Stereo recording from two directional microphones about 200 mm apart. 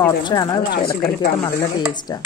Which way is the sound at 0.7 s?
50° left (ahead or behind).